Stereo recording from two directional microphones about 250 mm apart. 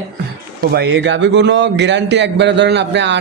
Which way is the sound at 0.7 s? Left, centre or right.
Right.